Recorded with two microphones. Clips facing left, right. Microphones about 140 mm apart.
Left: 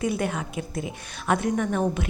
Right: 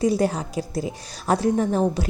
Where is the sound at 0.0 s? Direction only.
35° right (ahead or behind).